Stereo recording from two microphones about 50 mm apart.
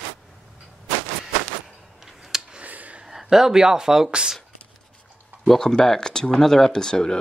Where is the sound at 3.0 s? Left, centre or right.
Centre.